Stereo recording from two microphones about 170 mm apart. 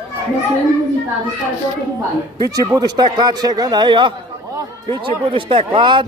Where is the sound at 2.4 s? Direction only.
20° right (ahead or behind).